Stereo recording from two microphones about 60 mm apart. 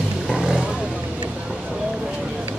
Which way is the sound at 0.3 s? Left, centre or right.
Centre.